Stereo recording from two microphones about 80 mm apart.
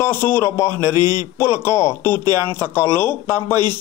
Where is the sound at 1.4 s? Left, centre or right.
Left.